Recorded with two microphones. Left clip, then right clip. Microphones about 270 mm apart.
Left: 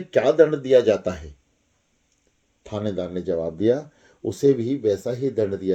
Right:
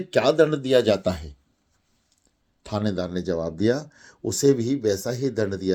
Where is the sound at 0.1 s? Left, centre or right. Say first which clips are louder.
Left 2 dB; right.